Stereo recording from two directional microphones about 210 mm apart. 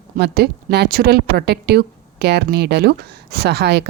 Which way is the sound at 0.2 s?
50° right (ahead or behind).